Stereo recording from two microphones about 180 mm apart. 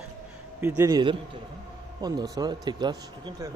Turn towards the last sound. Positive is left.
turn(degrees=-20)  # may be behind; listen again after turning